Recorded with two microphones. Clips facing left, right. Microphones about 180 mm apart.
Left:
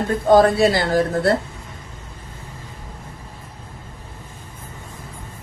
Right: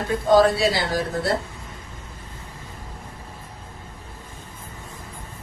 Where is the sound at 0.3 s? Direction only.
50° left (ahead or behind).